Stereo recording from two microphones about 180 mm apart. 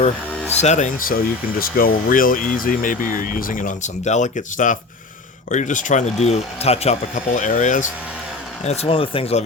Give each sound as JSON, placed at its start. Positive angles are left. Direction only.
{"t": 0.6, "sound": "speech", "side_deg": 40}